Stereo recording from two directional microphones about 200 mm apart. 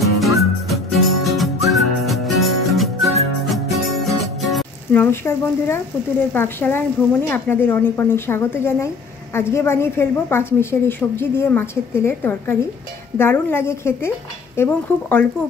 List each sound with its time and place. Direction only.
0.0 s music: centre (ahead or behind)
5.0 s a woman's voice: 10° left (ahead or behind)